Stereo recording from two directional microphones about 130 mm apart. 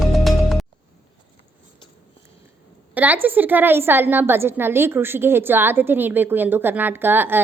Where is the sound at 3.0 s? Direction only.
15° right (ahead or behind).